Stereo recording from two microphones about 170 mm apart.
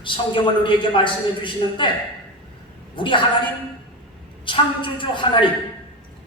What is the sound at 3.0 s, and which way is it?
Speech, 30° left (ahead or behind).